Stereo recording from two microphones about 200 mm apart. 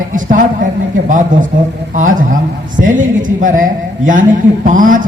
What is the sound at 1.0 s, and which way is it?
Music, 40° right (ahead or behind).